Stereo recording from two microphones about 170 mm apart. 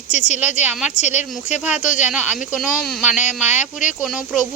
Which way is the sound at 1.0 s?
45° left (ahead or behind).